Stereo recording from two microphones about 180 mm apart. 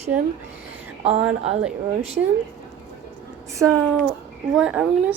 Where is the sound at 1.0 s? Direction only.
35° right (ahead or behind).